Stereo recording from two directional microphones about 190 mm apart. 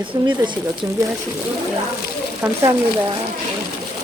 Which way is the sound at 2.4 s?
15° right (ahead or behind).